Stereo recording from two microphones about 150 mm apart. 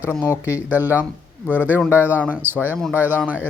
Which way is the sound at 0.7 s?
10° right (ahead or behind).